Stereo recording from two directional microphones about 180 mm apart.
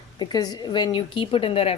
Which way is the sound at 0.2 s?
20° left (ahead or behind).